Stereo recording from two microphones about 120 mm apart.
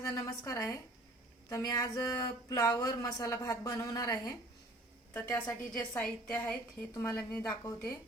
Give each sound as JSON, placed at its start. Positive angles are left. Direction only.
{"t": 0.0, "sound": "speech", "side_deg": 30}
{"t": 5.7, "sound": "a woman's voice", "side_deg": 10}
{"t": 6.9, "sound": "speech", "side_deg": 25}